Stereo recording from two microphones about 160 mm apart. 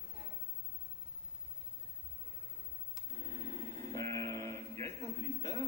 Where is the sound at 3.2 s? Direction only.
25° left (ahead or behind).